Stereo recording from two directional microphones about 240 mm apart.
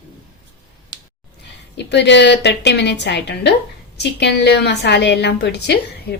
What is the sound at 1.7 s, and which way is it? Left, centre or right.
A woman's voice, left.